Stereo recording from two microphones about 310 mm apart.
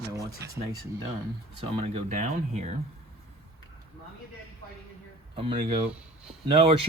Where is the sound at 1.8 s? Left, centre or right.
Right.